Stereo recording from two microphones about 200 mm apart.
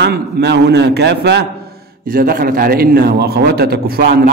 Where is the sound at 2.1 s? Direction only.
45° right (ahead or behind).